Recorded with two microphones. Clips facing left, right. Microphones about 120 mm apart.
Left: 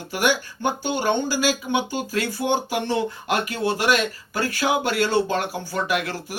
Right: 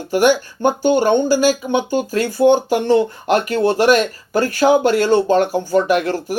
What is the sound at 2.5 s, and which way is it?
Speech, 50° right (ahead or behind).